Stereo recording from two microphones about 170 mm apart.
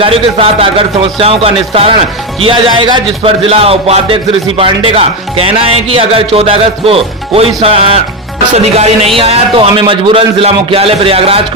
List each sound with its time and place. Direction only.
0.0 s speech: 35° right (ahead or behind)